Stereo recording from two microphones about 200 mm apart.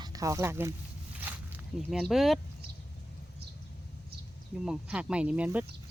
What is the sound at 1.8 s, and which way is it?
Speech, centre (ahead or behind).